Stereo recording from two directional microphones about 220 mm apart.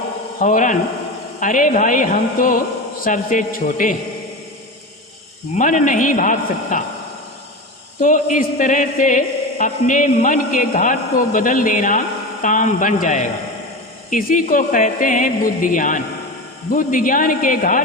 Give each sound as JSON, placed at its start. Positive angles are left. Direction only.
{"t": 0.3, "sound": "speech", "side_deg": 35}
{"t": 5.5, "sound": "speech", "side_deg": 35}
{"t": 8.0, "sound": "speech", "side_deg": 35}